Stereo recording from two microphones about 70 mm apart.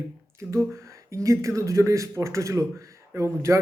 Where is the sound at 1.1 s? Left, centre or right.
Right.